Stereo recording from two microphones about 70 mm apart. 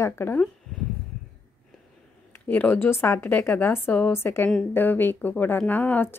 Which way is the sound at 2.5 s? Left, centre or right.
Left.